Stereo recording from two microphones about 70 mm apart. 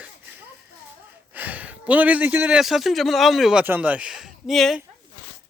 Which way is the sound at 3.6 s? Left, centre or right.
Right.